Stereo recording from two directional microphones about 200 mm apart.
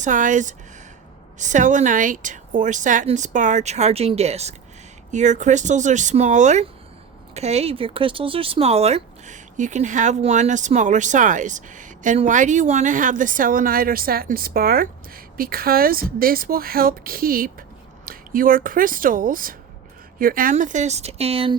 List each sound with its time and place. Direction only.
0.0 s speech: 40° right (ahead or behind)